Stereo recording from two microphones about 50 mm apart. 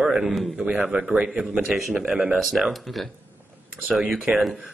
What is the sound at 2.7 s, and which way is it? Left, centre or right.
A man's voice, centre.